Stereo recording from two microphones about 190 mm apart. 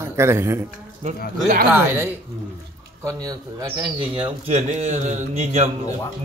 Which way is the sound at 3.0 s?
20° right (ahead or behind).